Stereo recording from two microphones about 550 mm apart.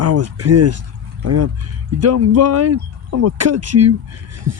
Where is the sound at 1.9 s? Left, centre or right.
Right.